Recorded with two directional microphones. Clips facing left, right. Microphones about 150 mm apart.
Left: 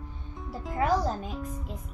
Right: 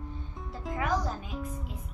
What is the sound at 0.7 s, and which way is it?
Music, 35° left (ahead or behind).